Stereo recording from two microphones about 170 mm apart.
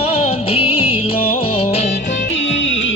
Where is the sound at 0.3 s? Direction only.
35° left (ahead or behind).